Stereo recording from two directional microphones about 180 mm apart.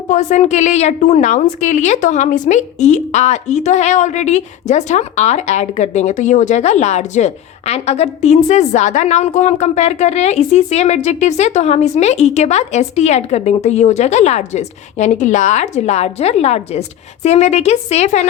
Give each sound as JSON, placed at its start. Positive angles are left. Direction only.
{"t": 0.1, "sound": "a woman's voice", "side_deg": 40}